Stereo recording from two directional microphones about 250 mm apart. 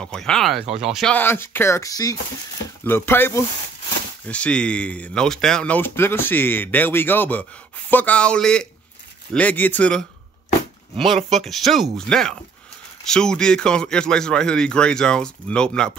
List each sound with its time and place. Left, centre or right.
0.0 s speech: centre